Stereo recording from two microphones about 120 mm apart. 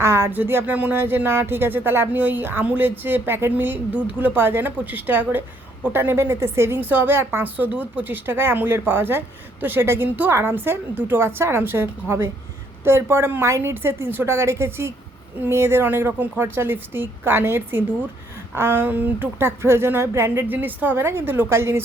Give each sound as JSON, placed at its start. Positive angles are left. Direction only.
{"t": 0.0, "sound": "a woman's voice", "side_deg": -20}